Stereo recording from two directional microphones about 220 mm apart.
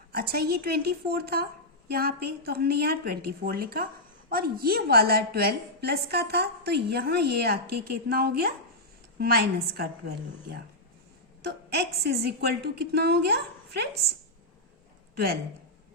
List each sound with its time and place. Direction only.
0.1 s a woman's voice: 45° right (ahead or behind)
11.4 s a woman's voice: 45° right (ahead or behind)
15.1 s speech: 45° right (ahead or behind)